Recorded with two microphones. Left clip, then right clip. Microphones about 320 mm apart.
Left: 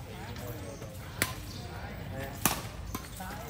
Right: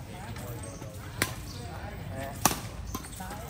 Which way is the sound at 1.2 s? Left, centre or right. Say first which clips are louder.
Right 2 dB; centre.